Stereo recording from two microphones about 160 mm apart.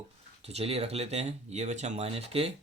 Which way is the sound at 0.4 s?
40° right (ahead or behind).